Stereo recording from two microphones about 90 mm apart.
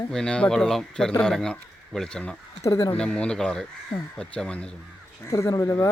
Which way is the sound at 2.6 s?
35° left (ahead or behind).